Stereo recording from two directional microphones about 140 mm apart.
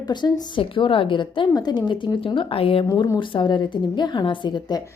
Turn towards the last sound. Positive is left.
turn(degrees=30)  # may be behind; listen again after turning